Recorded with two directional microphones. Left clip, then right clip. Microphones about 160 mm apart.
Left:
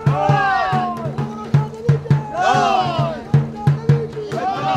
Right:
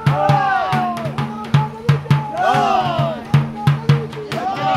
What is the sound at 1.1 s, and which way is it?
Drum, 40° left (ahead or behind).